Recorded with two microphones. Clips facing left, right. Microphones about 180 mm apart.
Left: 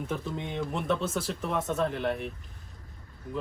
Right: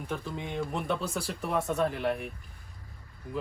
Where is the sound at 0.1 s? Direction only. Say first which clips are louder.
Right 2 dB; centre (ahead or behind).